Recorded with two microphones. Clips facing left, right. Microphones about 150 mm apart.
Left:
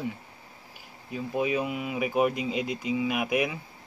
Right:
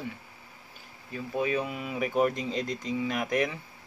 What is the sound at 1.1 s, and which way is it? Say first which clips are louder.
Speech: left 2 dB; 10° left (ahead or behind).